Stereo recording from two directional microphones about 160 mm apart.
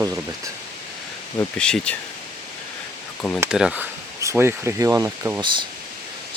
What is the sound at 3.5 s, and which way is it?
Speech, 5° right (ahead or behind).